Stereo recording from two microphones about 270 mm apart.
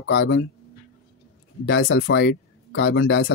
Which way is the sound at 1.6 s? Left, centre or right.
Left.